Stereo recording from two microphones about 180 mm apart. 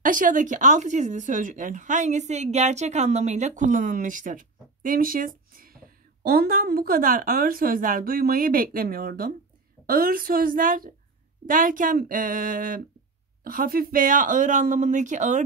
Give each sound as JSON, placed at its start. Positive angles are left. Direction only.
{"t": 0.0, "sound": "speech", "side_deg": -50}